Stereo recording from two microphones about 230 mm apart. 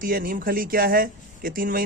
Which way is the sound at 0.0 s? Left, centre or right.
Right.